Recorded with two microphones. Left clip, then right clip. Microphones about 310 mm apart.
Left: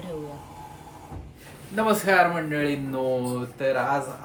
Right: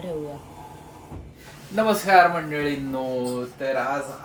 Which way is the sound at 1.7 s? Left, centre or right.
Centre.